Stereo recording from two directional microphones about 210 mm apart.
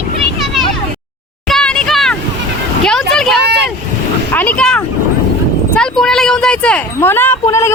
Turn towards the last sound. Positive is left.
turn(degrees=15)  # may be behind; listen again after turning